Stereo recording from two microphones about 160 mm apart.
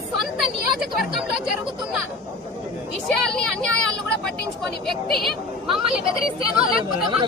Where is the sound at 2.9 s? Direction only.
Centre (ahead or behind).